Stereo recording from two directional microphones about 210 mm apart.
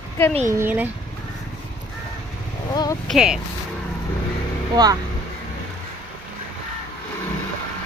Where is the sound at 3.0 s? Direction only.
Centre (ahead or behind).